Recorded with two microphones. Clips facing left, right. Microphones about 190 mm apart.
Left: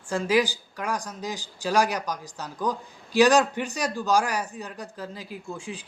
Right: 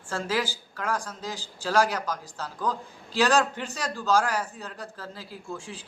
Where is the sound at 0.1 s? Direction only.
15° left (ahead or behind).